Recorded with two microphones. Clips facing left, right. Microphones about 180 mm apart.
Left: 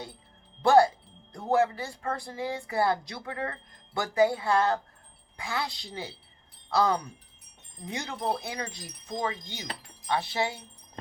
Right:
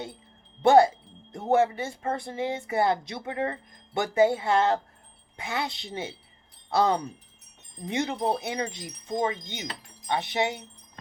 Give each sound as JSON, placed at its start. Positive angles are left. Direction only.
{"t": 0.6, "sound": "speech", "side_deg": -20}